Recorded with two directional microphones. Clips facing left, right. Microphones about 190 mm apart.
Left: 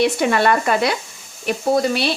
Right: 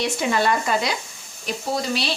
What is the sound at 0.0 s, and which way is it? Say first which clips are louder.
Speech: left 5 dB; 60° left (ahead or behind).